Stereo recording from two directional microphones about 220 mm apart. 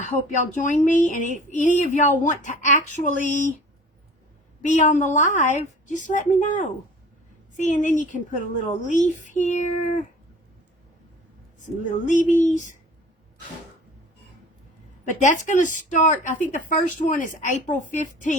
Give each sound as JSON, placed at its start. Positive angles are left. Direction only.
{"t": 0.6, "sound": "a woman's voice", "side_deg": 35}
{"t": 4.6, "sound": "a woman's voice", "side_deg": 35}
{"t": 11.6, "sound": "a woman's voice", "side_deg": 35}
{"t": 15.2, "sound": "a woman's voice", "side_deg": 35}